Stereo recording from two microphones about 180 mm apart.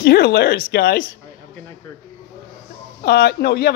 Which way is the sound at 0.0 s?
65° left (ahead or behind).